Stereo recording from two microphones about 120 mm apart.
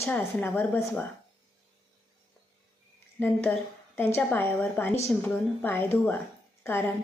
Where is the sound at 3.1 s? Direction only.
15° left (ahead or behind).